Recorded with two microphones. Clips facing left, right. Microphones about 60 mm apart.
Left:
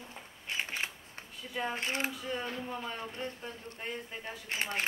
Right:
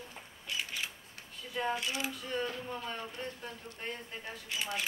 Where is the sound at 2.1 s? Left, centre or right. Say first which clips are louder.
Right 1 dB; centre.